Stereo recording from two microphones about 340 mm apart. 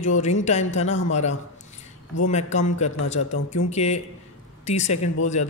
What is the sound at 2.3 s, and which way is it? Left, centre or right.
Speech, centre.